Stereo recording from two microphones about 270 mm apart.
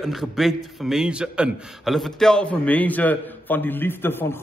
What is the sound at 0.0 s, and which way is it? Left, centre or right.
A man's voice, centre.